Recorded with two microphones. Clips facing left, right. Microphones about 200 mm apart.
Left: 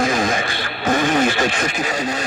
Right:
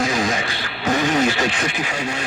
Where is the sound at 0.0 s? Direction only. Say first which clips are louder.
Left 2 dB; 50° left (ahead or behind).